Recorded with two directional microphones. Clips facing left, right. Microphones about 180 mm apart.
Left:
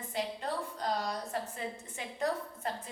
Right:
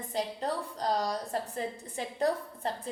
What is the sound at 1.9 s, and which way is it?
Speech, 35° right (ahead or behind).